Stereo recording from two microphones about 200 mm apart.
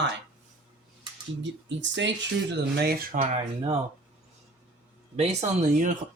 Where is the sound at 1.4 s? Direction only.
65° right (ahead or behind).